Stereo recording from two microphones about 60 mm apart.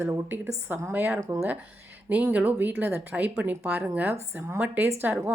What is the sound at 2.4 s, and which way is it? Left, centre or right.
A woman's voice, right.